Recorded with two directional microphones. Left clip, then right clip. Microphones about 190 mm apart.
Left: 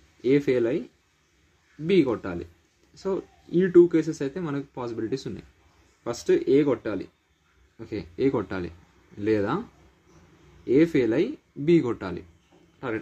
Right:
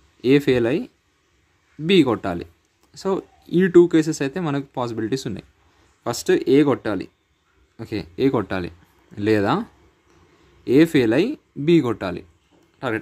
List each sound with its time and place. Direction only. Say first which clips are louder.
0.2 s speech: right 5 dB; 45° right (ahead or behind)
1.9 s speech: right 5 dB; 45° right (ahead or behind)
10.6 s a man's voice: right 5 dB; 45° right (ahead or behind)